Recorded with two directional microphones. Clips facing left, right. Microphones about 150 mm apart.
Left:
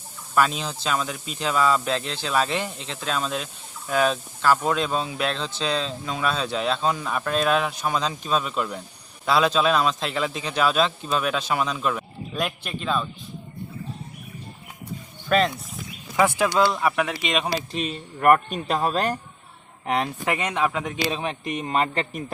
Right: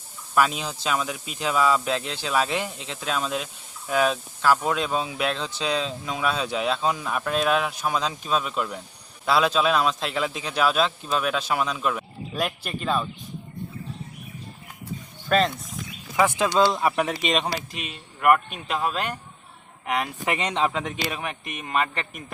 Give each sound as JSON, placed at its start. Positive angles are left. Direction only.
{"t": 0.3, "sound": "speech", "side_deg": -5}
{"t": 15.3, "sound": "speech", "side_deg": 0}
{"t": 16.4, "sound": "speech", "side_deg": -20}
{"t": 17.5, "sound": "speech", "side_deg": 35}
{"t": 20.5, "sound": "speech", "side_deg": -25}
{"t": 21.0, "sound": "speech", "side_deg": 25}